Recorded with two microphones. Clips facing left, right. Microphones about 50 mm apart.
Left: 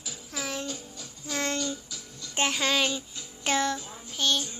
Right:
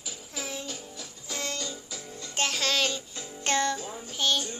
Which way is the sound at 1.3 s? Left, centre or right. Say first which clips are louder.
Left 5 dB; left.